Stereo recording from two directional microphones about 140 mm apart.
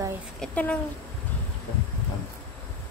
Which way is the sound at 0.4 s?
10° left (ahead or behind).